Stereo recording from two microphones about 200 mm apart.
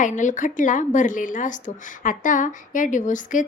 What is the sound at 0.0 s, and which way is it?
A woman's voice, 40° left (ahead or behind).